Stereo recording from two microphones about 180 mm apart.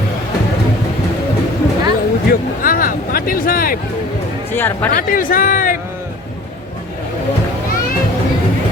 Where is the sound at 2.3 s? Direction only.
50° left (ahead or behind).